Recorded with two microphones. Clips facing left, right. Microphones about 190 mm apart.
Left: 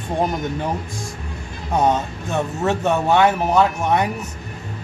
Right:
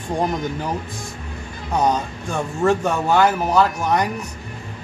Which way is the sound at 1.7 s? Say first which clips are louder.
Left 1 dB; 25° left (ahead or behind).